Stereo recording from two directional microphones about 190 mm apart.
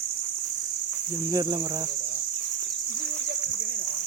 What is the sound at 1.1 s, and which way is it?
Speech, 20° right (ahead or behind).